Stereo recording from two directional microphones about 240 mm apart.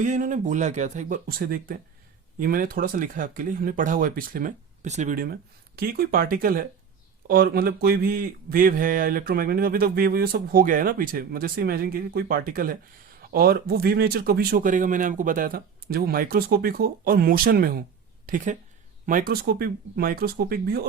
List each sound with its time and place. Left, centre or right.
0.0 s speech: right